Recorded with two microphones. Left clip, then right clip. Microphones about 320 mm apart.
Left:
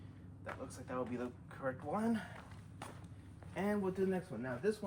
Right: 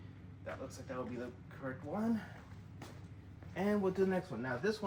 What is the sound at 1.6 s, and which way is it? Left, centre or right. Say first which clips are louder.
Speech: left 4 dB; centre.